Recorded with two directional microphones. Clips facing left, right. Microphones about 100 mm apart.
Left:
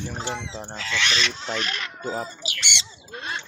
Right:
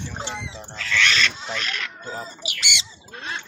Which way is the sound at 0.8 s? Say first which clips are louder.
Right 4 dB; 20° left (ahead or behind).